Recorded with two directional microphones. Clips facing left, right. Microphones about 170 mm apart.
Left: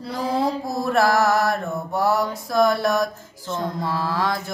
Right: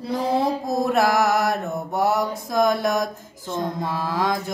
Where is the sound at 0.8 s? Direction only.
15° right (ahead or behind).